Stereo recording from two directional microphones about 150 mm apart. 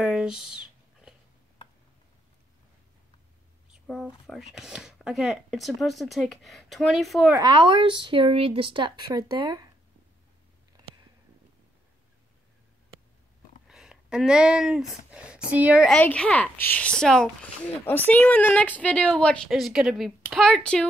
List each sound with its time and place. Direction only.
0.0 s speech: 5° right (ahead or behind)
3.8 s speech: centre (ahead or behind)
7.3 s speech: 30° right (ahead or behind)
13.7 s speech: 5° right (ahead or behind)
15.9 s speech: 10° left (ahead or behind)